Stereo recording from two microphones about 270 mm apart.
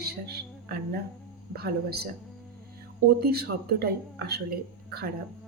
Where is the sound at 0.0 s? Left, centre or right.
Right.